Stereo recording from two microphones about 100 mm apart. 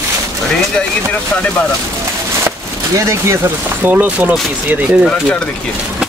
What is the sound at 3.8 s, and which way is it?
Speech, 15° right (ahead or behind).